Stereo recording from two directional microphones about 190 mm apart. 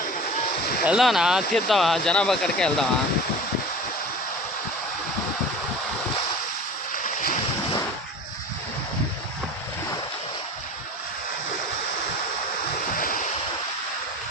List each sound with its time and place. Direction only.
0.9 s speech: centre (ahead or behind)
6.9 s boat: 45° left (ahead or behind)
13.0 s waves: 45° left (ahead or behind)